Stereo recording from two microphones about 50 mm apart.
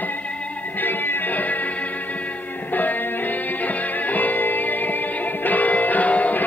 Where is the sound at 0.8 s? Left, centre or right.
Left.